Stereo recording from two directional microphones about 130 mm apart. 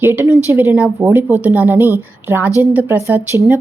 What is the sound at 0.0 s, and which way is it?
A woman's voice, 15° right (ahead or behind).